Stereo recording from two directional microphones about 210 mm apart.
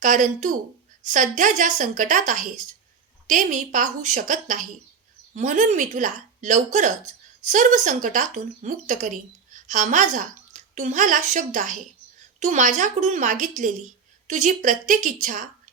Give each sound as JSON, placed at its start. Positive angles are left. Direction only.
{"t": 0.0, "sound": "speech", "side_deg": -35}